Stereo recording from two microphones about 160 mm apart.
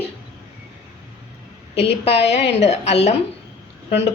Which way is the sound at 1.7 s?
40° left (ahead or behind).